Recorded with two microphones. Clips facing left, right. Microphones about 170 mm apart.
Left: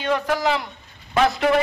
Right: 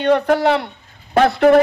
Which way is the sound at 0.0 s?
60° right (ahead or behind).